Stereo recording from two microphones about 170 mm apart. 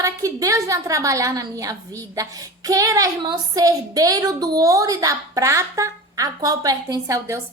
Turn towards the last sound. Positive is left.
turn(degrees=-20)  # may be behind; listen again after turning